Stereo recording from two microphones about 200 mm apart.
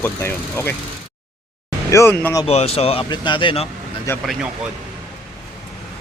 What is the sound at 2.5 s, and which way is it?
Speech, 30° left (ahead or behind).